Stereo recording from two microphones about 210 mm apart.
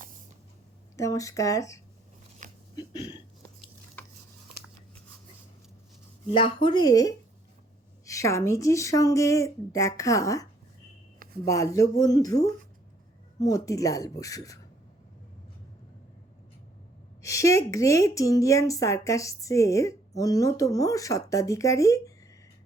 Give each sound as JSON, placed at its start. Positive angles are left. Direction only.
{"t": 0.9, "sound": "speech", "side_deg": 15}
{"t": 2.4, "sound": "a sound", "side_deg": -35}
{"t": 2.7, "sound": "a sound", "side_deg": 20}
{"t": 6.3, "sound": "speech", "side_deg": 25}
{"t": 11.4, "sound": "speech", "side_deg": 15}
{"t": 17.2, "sound": "speech", "side_deg": 15}